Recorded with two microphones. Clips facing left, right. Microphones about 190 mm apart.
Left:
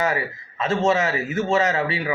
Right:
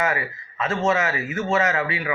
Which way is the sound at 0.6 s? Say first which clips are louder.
Left 2 dB; 35° left (ahead or behind).